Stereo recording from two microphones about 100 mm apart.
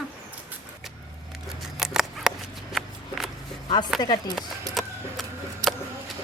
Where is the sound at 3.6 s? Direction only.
45° left (ahead or behind).